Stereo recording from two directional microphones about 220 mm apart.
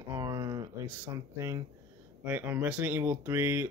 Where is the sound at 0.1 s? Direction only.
15° right (ahead or behind).